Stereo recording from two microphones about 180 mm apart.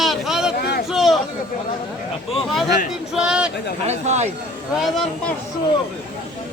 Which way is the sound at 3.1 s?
5° right (ahead or behind).